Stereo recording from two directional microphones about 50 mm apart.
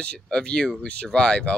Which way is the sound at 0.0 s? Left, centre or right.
Centre.